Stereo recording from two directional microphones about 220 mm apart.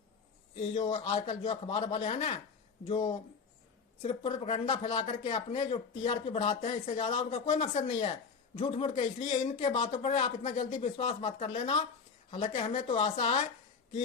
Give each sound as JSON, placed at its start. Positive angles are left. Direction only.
{"t": 0.6, "sound": "speech", "side_deg": 25}